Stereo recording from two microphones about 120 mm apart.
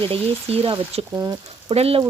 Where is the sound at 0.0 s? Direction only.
50° right (ahead or behind).